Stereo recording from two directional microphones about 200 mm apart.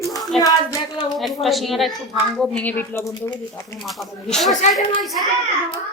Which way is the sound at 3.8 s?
Centre (ahead or behind).